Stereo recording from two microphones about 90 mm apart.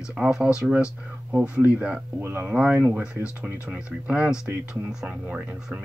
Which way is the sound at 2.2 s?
25° right (ahead or behind).